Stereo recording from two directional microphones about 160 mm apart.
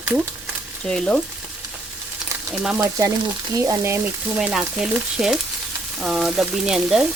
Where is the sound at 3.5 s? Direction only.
20° right (ahead or behind).